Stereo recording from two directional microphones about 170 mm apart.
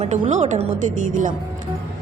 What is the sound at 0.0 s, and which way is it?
Speech, 45° right (ahead or behind).